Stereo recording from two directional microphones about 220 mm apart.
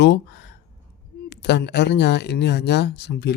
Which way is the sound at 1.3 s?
50° left (ahead or behind).